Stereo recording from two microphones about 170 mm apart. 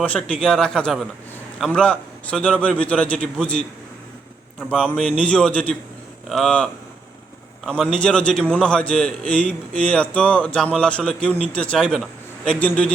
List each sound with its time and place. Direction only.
0.0 s a man's voice: 5° left (ahead or behind)
4.7 s a man's voice: 5° left (ahead or behind)